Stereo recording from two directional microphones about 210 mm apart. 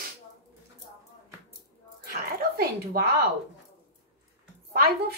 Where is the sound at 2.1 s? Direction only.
45° right (ahead or behind).